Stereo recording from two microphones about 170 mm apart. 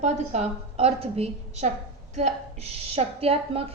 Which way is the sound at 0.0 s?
40° right (ahead or behind).